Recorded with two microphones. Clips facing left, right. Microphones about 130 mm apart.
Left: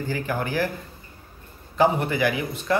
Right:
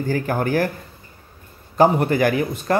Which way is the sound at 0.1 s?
45° right (ahead or behind).